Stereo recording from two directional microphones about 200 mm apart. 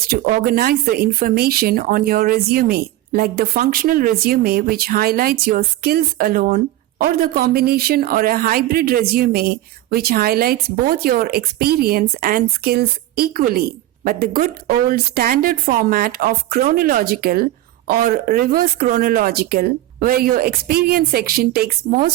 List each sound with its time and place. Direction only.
0.1 s speech: 45° right (ahead or behind)